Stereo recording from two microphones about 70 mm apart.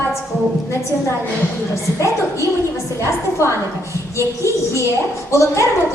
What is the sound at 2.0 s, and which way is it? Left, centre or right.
A woman's voice, left.